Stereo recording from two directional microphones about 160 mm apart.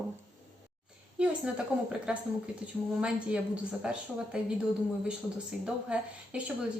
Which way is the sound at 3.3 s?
5° right (ahead or behind).